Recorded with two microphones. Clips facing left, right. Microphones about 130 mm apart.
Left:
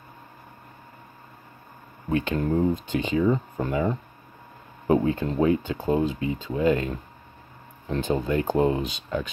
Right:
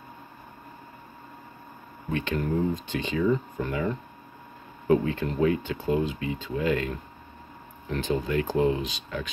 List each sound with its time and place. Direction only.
2.0 s speech: 30° left (ahead or behind)